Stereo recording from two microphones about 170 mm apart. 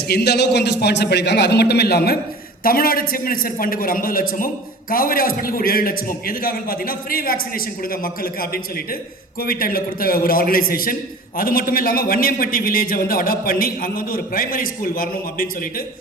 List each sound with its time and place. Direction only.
0.1 s a man's voice: 75° left (ahead or behind)
2.6 s a man's voice: 60° left (ahead or behind)